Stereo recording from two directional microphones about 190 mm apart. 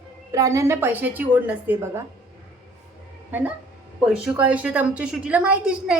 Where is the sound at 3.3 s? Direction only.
10° right (ahead or behind).